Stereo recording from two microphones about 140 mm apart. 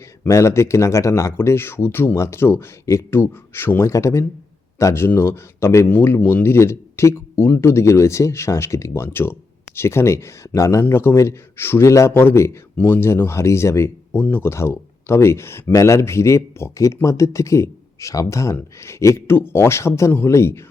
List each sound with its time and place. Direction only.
0.3 s speech: 20° left (ahead or behind)